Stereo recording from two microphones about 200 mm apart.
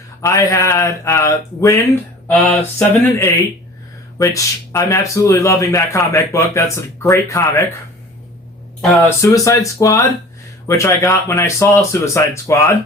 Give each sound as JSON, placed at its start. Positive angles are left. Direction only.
{"t": 0.2, "sound": "speech", "side_deg": 15}
{"t": 8.8, "sound": "speech", "side_deg": 15}